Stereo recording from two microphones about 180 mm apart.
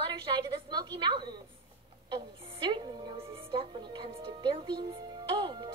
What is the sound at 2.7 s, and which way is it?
Music, 25° right (ahead or behind).